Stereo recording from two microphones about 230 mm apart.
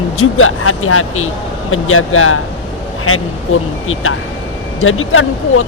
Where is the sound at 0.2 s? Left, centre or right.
Left.